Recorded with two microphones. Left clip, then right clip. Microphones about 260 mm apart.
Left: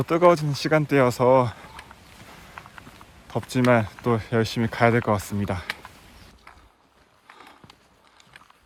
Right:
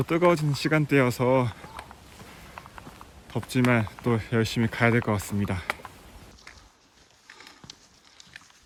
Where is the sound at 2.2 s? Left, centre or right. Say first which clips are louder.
Left 2 dB; centre.